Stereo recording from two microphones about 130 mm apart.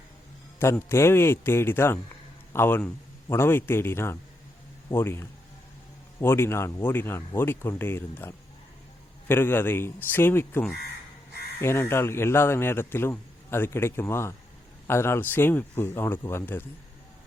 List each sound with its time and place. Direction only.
0.6 s a man's voice: 20° left (ahead or behind)